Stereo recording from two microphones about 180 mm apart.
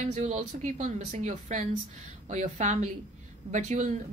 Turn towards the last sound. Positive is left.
turn(degrees=-40)  # may be behind; listen again after turning